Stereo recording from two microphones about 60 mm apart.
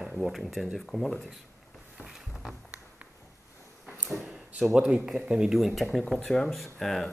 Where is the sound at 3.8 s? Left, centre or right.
Centre.